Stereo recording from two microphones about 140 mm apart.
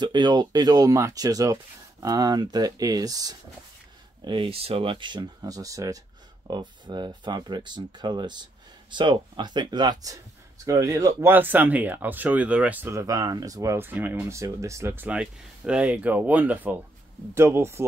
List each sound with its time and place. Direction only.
0.0 s speech: 30° right (ahead or behind)